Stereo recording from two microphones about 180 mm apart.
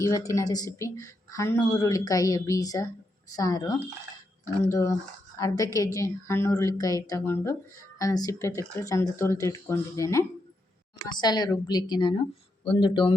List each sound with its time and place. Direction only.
0.0 s speech: 15° left (ahead or behind)